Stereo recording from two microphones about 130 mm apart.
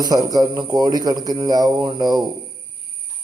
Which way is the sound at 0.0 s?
30° right (ahead or behind).